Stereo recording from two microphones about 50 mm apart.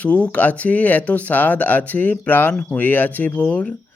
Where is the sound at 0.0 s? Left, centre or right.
Left.